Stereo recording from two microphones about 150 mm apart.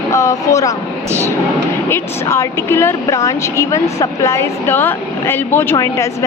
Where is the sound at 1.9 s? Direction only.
20° left (ahead or behind).